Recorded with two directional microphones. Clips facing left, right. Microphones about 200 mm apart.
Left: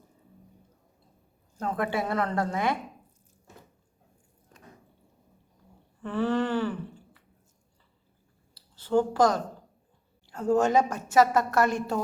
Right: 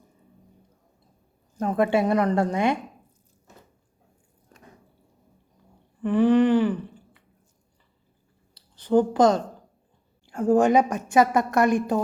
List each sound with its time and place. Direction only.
1.5 s a woman's voice: 20° right (ahead or behind)
6.0 s a sound: 15° right (ahead or behind)
8.7 s a woman's voice: 20° right (ahead or behind)